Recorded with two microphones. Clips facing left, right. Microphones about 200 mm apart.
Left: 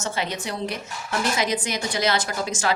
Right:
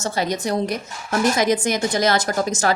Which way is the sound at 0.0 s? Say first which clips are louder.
Right 5 dB; 40° right (ahead or behind).